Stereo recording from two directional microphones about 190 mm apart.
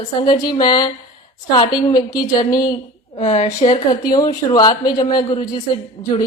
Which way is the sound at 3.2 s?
35° left (ahead or behind).